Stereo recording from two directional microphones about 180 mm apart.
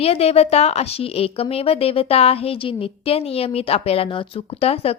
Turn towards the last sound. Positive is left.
turn(degrees=35)  # may be behind; listen again after turning